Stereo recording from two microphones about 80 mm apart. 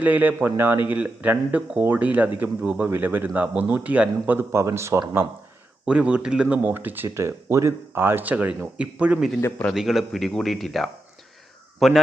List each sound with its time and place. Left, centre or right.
0.0 s speech: right
4.5 s speech: right
5.8 s speech: centre
6.6 s speech: right
9.7 s speech: centre